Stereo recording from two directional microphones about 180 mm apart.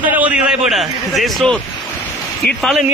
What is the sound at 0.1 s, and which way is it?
A man's voice, 5° right (ahead or behind).